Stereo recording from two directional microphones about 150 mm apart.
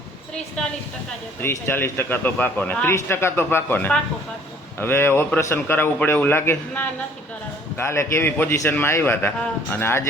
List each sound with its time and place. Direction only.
1.4 s a man's voice: 15° left (ahead or behind)